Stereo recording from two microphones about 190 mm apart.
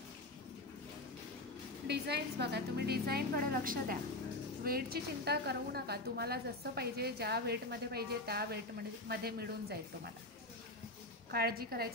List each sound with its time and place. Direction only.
1.9 s a woman's voice: 60° right (ahead or behind)
11.3 s a woman's voice: 55° right (ahead or behind)